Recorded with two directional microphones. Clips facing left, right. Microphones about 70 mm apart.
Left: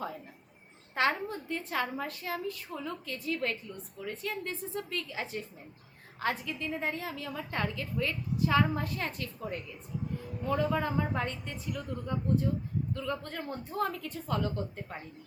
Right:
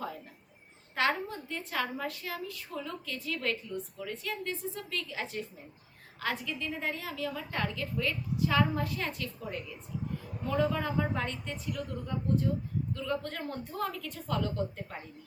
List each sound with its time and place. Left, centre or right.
0.9 s a woman's voice: left
13.7 s a woman's voice: left